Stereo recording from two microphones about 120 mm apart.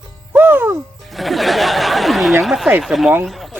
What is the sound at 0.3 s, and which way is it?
Music, 15° right (ahead or behind).